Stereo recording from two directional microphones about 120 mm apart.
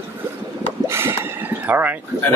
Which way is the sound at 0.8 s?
20° right (ahead or behind).